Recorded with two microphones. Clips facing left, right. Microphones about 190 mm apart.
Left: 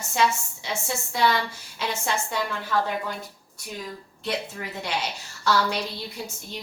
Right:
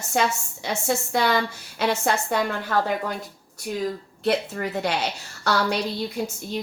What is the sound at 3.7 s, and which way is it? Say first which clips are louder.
Speech: right 8 dB; 45° right (ahead or behind).